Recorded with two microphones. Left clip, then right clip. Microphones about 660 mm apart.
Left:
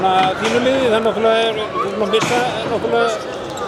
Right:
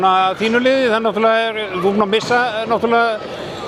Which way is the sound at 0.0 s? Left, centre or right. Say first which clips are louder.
Right 1 dB; right.